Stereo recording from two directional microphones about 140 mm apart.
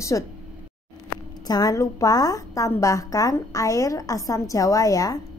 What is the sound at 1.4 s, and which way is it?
A woman's voice, 25° left (ahead or behind).